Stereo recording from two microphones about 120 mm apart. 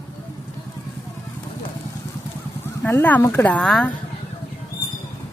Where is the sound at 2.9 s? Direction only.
15° left (ahead or behind).